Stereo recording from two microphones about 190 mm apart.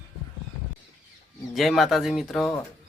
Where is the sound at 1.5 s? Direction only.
Centre (ahead or behind).